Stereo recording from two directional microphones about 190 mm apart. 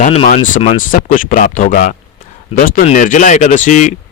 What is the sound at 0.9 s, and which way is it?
A man's voice, 45° left (ahead or behind).